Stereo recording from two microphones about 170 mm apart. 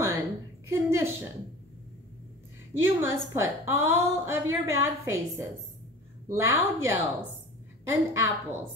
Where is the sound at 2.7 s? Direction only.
15° right (ahead or behind).